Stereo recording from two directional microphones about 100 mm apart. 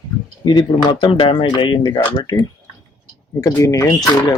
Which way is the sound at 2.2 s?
40° left (ahead or behind).